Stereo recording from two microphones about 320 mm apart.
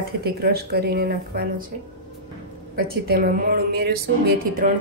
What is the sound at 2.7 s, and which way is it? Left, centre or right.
A woman's voice, right.